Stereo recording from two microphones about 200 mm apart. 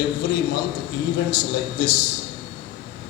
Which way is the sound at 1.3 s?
55° left (ahead or behind).